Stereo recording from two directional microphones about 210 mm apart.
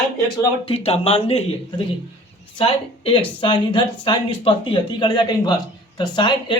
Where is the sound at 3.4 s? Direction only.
25° left (ahead or behind).